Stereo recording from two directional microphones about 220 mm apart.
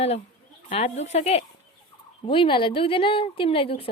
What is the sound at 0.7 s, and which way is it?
A woman's voice, 30° left (ahead or behind).